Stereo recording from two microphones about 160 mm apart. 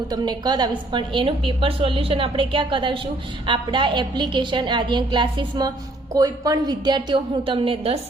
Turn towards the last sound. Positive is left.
turn(degrees=-35)  # may be behind; listen again after turning